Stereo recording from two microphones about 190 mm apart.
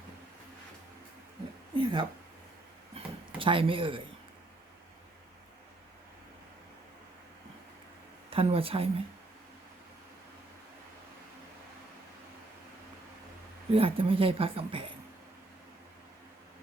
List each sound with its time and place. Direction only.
1.7 s a sound: 25° right (ahead or behind)
8.3 s speech: 30° right (ahead or behind)
13.7 s a woman's voice: 30° right (ahead or behind)